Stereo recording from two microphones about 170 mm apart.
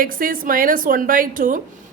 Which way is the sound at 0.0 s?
55° right (ahead or behind).